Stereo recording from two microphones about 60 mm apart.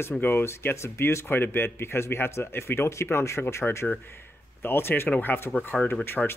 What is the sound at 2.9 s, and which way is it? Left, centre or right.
Speech, left.